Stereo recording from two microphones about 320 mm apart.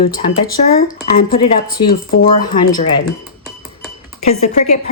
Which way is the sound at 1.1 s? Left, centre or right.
Left.